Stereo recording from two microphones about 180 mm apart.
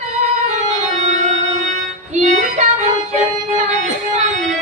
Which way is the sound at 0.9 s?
40° right (ahead or behind).